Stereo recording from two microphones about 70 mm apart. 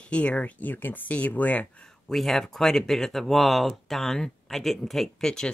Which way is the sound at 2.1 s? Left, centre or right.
Centre.